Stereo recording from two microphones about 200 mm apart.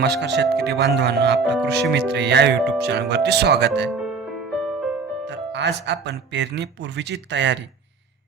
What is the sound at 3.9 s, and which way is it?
Music, centre (ahead or behind).